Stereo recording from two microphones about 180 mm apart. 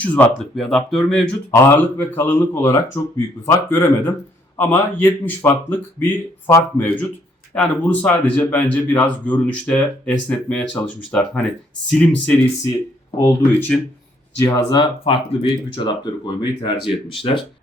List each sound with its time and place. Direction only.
0.0 s speech: 10° left (ahead or behind)
13.1 s speech: 20° left (ahead or behind)